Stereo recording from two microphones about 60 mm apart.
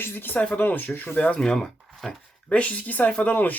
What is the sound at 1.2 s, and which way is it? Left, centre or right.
Speech, centre.